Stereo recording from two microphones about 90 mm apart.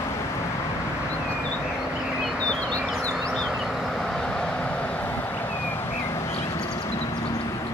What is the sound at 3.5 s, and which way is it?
Vehicle, centre (ahead or behind).